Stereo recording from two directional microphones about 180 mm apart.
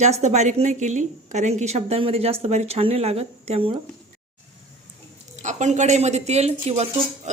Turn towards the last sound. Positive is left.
turn(degrees=-35)  # may be behind; listen again after turning